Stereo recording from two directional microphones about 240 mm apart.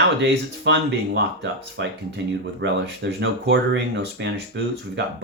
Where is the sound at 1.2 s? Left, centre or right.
Right.